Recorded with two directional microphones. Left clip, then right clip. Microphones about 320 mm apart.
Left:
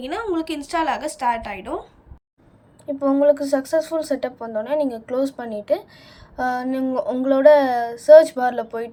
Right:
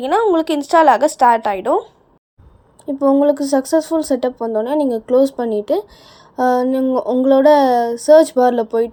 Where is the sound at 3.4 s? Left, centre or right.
Centre.